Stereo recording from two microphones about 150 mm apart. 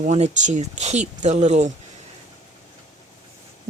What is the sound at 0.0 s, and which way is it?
Speech, 50° right (ahead or behind).